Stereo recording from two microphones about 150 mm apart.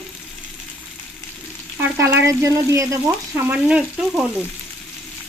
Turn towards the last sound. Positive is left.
turn(degrees=-5)  # may be behind; listen again after turning